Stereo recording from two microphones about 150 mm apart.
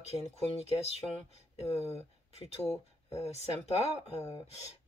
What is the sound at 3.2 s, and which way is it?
Speech, 45° left (ahead or behind).